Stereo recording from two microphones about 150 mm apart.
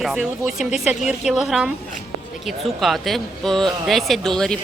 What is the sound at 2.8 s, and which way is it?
Speech, centre (ahead or behind).